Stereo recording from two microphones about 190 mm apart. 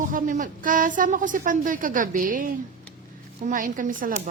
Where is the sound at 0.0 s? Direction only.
45° right (ahead or behind).